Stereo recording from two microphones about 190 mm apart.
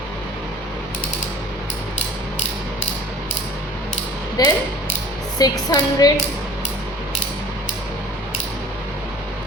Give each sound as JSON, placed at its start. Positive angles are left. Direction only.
{"t": 4.4, "sound": "music", "side_deg": 20}